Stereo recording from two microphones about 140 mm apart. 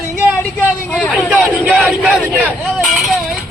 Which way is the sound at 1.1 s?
5° right (ahead or behind).